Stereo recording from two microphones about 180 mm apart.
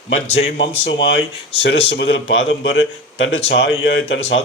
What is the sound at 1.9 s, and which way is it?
Speech, 80° left.